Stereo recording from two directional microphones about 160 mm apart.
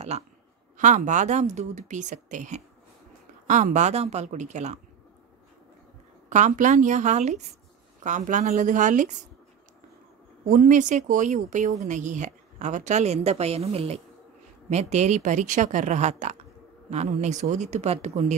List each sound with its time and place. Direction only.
0.1 s speech: 40° right (ahead or behind)
6.2 s speech: 50° right (ahead or behind)
10.5 s speech: 55° right (ahead or behind)